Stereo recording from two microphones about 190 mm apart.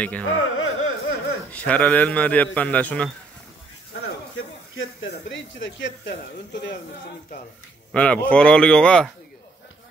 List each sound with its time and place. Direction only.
0.0 s a man's voice: 5° left (ahead or behind)
0.3 s music: 90° left
1.5 s a man's voice: 10° left (ahead or behind)
4.0 s a sound: 90° left
5.3 s speech: 75° left (ahead or behind)
7.9 s a man's voice: 5° left (ahead or behind)